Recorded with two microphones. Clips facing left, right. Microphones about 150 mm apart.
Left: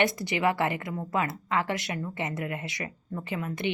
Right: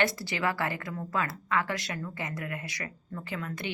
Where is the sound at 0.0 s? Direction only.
20° left (ahead or behind).